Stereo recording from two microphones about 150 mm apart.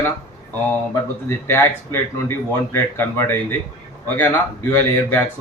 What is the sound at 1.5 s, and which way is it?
Speech, 15° left (ahead or behind).